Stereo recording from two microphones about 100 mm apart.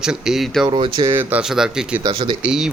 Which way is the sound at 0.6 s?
50° right (ahead or behind).